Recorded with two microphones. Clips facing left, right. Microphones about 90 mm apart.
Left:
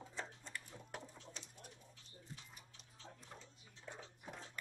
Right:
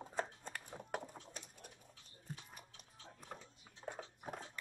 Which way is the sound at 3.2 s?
55° right (ahead or behind).